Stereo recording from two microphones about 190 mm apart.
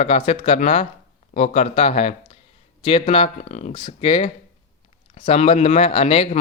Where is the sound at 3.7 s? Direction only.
25° left (ahead or behind).